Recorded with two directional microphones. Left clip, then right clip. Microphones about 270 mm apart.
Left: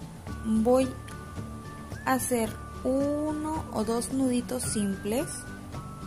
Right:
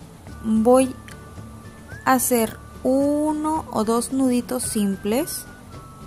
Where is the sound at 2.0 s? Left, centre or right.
Centre.